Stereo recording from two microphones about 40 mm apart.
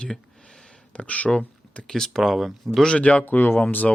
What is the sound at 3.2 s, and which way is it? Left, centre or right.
Speech, left.